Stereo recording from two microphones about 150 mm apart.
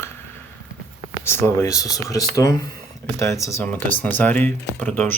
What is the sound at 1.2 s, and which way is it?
Speech, 15° left (ahead or behind).